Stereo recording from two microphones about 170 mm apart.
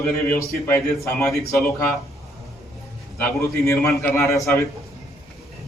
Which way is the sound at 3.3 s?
15° left (ahead or behind).